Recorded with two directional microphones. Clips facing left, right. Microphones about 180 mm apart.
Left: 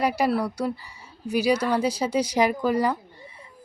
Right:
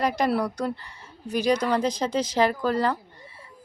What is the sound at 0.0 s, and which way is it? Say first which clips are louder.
A woman's voice: left 1 dB; 10° left (ahead or behind).